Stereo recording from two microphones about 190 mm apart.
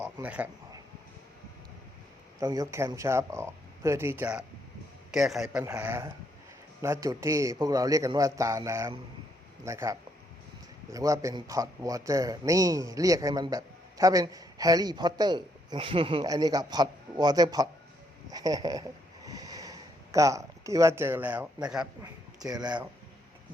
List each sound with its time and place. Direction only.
0.0 s speech: 5° right (ahead or behind)
2.4 s a man's voice: 20° right (ahead or behind)
18.3 s a sound: 20° right (ahead or behind)
22.4 s speech: 20° right (ahead or behind)